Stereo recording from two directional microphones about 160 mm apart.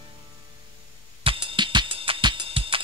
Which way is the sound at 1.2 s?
35° right (ahead or behind).